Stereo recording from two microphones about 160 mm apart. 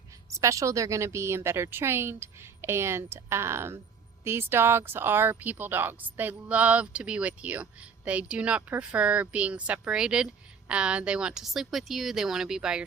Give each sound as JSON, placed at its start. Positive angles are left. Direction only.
{"t": 0.3, "sound": "speech", "side_deg": -20}